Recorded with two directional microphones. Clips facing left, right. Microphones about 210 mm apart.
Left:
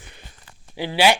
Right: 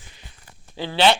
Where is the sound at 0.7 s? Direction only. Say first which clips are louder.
Even; 15° left (ahead or behind).